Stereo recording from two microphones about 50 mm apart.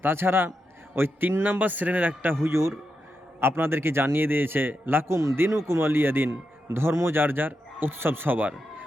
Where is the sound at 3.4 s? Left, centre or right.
Right.